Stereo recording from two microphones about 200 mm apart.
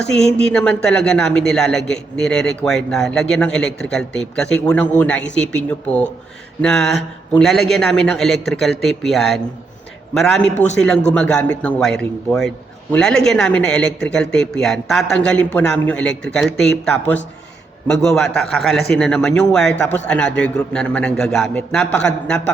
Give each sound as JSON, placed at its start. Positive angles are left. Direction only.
{"t": 0.0, "sound": "a man's voice", "side_deg": 5}
{"t": 6.6, "sound": "a man's voice", "side_deg": 0}
{"t": 10.5, "sound": "a man's voice", "side_deg": 35}
{"t": 10.8, "sound": "a man's voice", "side_deg": 5}